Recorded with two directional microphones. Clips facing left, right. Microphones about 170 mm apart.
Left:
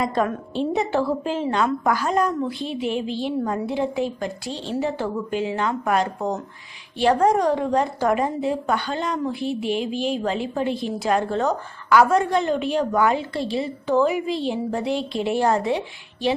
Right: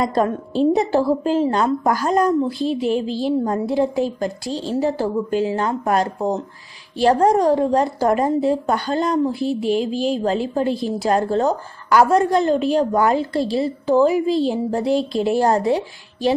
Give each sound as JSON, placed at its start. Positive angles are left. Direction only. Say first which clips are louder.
{"t": 0.0, "sound": "a woman's voice", "louder": "right 3 dB", "side_deg": -35}